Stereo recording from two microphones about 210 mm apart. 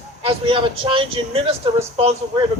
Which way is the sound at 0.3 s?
25° right (ahead or behind).